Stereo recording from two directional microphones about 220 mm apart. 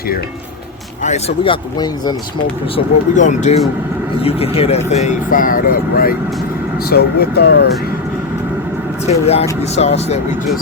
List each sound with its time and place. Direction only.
1.0 s speech: 30° left (ahead or behind)
2.7 s speech: 35° left (ahead or behind); by 7.7 s 50° left (ahead or behind)
9.0 s speech: 30° left (ahead or behind)